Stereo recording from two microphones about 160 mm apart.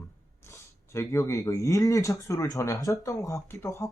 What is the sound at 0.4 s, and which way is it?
Speech, 15° left (ahead or behind).